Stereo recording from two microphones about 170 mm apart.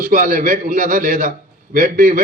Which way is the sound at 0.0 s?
55° right (ahead or behind).